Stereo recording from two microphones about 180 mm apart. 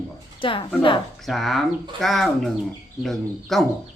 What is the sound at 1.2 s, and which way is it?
Speech, centre (ahead or behind).